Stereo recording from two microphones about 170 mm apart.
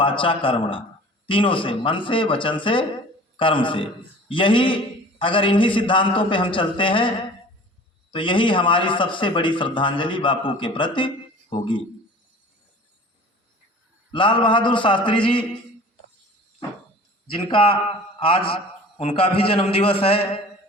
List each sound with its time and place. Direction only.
0.0 s a man's voice: 30° left (ahead or behind)
8.1 s a man's voice: 30° left (ahead or behind)
14.1 s a man's voice: 30° left (ahead or behind)
17.3 s a man's voice: 30° left (ahead or behind)